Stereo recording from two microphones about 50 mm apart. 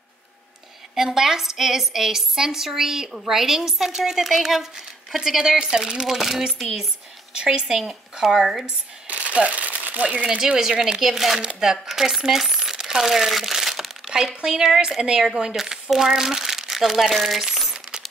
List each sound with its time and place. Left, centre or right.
0.9 s a woman's voice: centre
7.6 s speech: centre
8.6 s shuffling cards: right
10.2 s a woman's voice: centre